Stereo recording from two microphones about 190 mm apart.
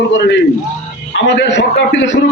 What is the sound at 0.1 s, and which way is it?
A man's voice, 70° left (ahead or behind).